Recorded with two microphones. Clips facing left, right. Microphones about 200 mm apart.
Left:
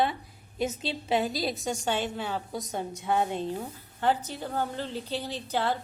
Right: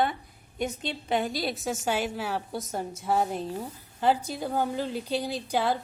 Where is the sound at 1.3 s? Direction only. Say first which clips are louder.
Even; centre (ahead or behind).